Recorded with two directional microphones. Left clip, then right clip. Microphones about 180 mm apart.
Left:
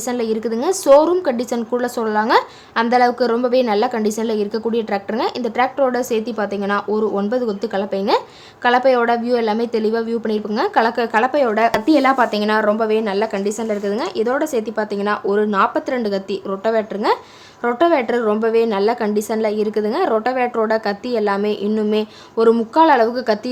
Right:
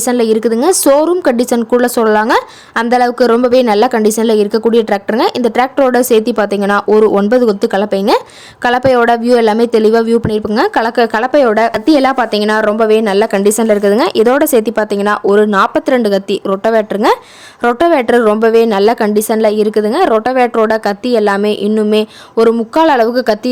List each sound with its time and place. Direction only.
0.0 s a woman's voice: 40° right (ahead or behind)